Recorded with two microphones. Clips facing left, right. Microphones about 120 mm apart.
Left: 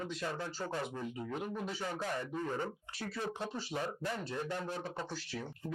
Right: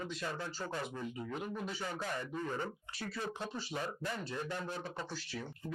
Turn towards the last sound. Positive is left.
turn(degrees=55)  # may be behind; listen again after turning